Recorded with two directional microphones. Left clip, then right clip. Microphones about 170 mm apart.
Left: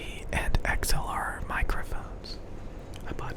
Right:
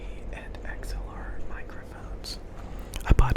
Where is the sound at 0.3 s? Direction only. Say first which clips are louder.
Left 12 dB; 70° left (ahead or behind).